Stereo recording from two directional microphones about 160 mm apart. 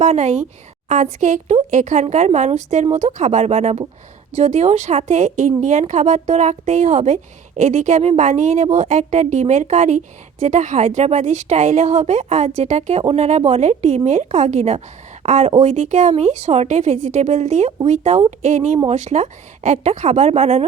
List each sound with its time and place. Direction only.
0.0 s a woman's voice: 45° right (ahead or behind)